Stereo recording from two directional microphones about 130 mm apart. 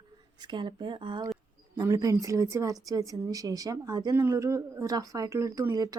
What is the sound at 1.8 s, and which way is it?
Speech, 25° right (ahead or behind).